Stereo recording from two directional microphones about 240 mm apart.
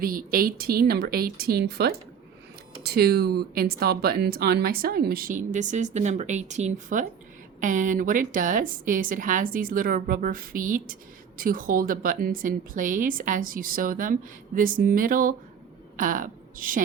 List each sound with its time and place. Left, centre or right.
0.0 s a woman's voice: right